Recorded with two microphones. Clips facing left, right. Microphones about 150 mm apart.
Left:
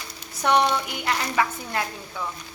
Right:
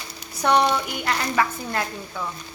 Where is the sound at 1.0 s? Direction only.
15° left (ahead or behind).